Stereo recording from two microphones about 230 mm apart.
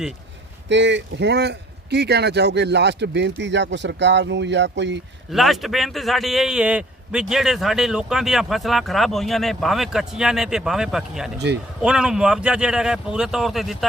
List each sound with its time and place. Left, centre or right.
0.7 s speech: right
5.3 s a man's voice: centre